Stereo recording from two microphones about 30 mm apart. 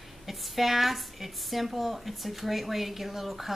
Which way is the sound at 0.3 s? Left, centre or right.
Centre.